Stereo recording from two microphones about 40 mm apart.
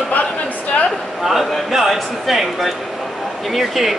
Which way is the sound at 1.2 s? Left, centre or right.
Centre.